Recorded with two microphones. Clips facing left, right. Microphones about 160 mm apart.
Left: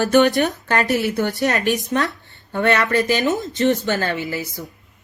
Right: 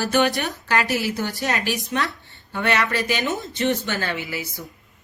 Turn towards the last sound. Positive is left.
turn(degrees=45)  # may be behind; listen again after turning